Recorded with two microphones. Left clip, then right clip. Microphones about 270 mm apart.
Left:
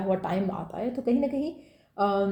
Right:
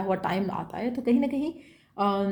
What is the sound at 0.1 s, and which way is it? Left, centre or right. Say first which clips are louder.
A woman's voice: left 1 dB; right.